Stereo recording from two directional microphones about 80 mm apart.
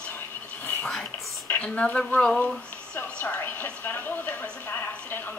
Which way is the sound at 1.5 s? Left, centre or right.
Centre.